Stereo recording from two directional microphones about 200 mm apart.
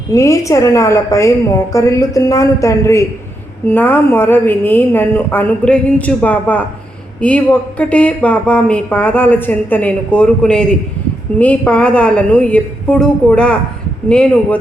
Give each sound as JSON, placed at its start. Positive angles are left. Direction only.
{"t": 0.1, "sound": "a woman's voice", "side_deg": 15}